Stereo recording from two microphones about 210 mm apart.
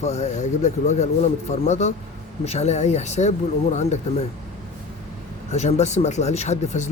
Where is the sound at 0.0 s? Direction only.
30° left (ahead or behind).